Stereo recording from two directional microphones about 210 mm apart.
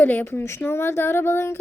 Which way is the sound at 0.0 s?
10° left (ahead or behind).